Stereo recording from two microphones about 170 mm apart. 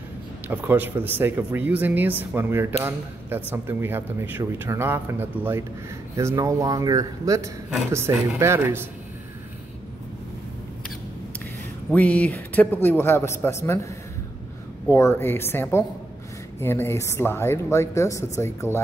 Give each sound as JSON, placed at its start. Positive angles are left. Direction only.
{"t": 0.5, "sound": "speech", "side_deg": -10}
{"t": 11.9, "sound": "a woman's voice", "side_deg": 10}
{"t": 14.9, "sound": "a woman's voice", "side_deg": 15}